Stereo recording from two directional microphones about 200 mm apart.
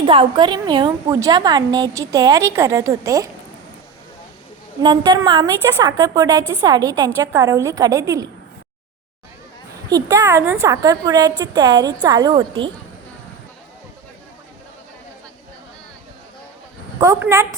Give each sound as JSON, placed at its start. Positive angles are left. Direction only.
{"t": 0.0, "sound": "a woman's voice", "side_deg": -25}
{"t": 4.8, "sound": "a woman's voice", "side_deg": -20}
{"t": 9.9, "sound": "a woman's voice", "side_deg": -15}
{"t": 17.0, "sound": "a woman's voice", "side_deg": -15}